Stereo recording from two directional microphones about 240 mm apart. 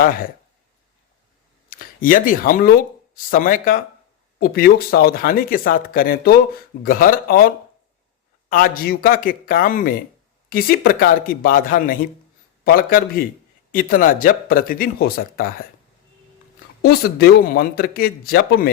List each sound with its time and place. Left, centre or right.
0.0 s speech: left
1.7 s speech: left
16.8 s speech: left